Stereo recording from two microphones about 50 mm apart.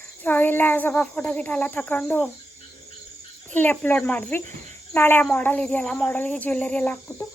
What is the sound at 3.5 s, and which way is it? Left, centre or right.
Cricket, left.